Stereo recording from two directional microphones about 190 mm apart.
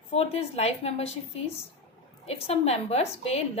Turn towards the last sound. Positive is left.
turn(degrees=35)  # may be behind; listen again after turning